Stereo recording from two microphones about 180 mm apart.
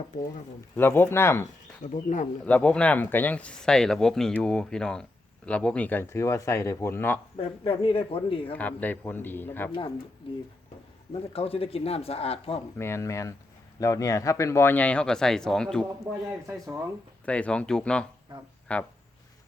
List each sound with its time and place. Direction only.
0.8 s speech: 10° left (ahead or behind)
1.8 s speech: 45° left (ahead or behind)
2.4 s speech: 5° left (ahead or behind)
7.3 s speech: 30° left (ahead or behind)
8.5 s speech: 10° left (ahead or behind)
11.1 s speech: 35° left (ahead or behind)
12.8 s speech: 15° left (ahead or behind)
16.5 s speech: 15° right (ahead or behind)
17.2 s speech: 5° left (ahead or behind)